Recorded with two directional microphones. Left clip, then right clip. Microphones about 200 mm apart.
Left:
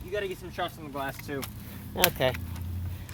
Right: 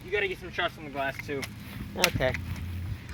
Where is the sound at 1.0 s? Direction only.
55° left (ahead or behind).